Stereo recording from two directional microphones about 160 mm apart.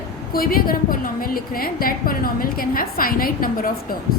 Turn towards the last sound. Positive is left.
turn(degrees=65)  # may be behind; listen again after turning